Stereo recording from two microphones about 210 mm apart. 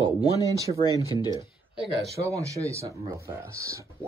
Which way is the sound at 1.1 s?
20° left (ahead or behind).